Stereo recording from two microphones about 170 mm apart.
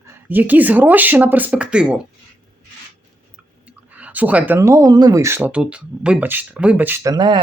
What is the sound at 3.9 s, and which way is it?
Speech, 10° right (ahead or behind).